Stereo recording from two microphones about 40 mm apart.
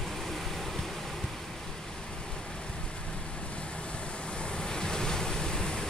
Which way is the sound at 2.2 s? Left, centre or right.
Left.